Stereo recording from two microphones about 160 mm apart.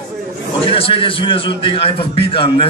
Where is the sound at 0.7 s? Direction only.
35° left (ahead or behind).